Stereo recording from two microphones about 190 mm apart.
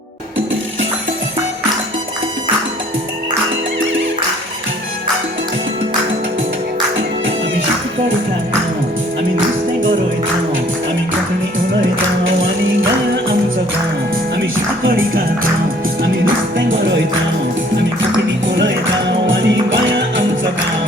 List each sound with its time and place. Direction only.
12.2 s music: 90° right
16.2 s music: 80° right
18.4 s music: 75° right (ahead or behind)